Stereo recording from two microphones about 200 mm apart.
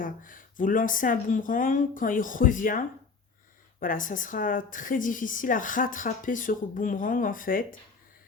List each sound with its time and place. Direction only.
0.0 s a woman's voice: 45° left (ahead or behind)